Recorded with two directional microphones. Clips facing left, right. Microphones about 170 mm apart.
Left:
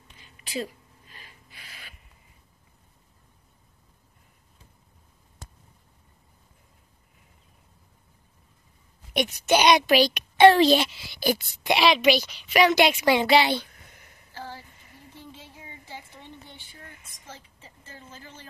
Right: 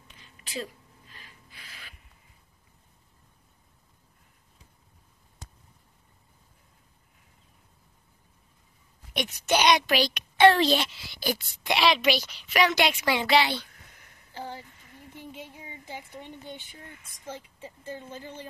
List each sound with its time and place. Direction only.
0.2 s a sound: 15° left (ahead or behind)
1.6 s rub: 15° left (ahead or behind)
9.1 s a child's voice: 10° left (ahead or behind)
10.6 s a woman's voice: 5° left (ahead or behind)
12.5 s a child's voice: 15° left (ahead or behind)
14.3 s a sound: 20° right (ahead or behind)
15.9 s a woman's voice: 20° right (ahead or behind)